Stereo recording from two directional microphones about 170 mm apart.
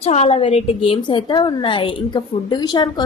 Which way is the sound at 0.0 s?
40° left (ahead or behind).